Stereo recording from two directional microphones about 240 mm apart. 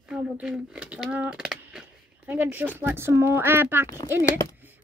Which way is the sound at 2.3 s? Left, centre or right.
Centre.